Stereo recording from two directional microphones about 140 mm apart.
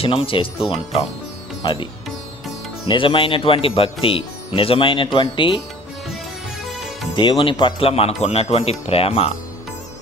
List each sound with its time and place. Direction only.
0.0 s speech: 40° left (ahead or behind)
6.7 s music: centre (ahead or behind)
7.1 s speech: 35° left (ahead or behind)